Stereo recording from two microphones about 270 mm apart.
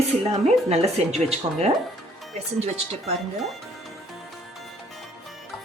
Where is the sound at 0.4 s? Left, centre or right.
Right.